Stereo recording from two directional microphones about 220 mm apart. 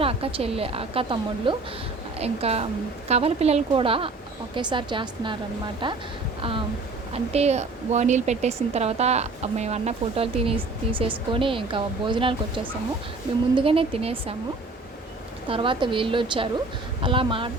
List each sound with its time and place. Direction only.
0.0 s a woman's voice: 25° right (ahead or behind)
7.1 s a woman's voice: 30° right (ahead or behind)
13.6 s a woman's voice: 25° right (ahead or behind)
15.4 s a woman's voice: 25° right (ahead or behind)